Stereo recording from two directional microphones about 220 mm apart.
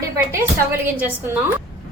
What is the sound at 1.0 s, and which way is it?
Speech, 5° right (ahead or behind).